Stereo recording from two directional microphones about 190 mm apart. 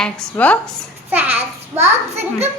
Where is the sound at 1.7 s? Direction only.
35° right (ahead or behind).